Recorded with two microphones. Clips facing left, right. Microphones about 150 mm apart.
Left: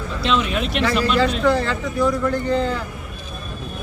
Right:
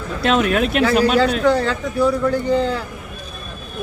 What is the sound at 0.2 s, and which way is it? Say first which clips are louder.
Speech: right 5 dB; 55° right (ahead or behind).